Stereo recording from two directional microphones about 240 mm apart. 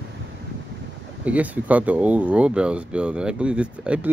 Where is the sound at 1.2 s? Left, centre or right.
Centre.